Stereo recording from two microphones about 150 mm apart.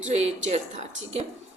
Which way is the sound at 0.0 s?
45° right (ahead or behind).